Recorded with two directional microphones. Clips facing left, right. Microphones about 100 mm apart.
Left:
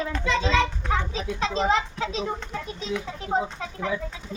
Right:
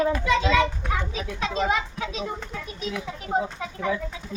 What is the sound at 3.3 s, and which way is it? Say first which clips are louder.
Speech: even; 25° left (ahead or behind).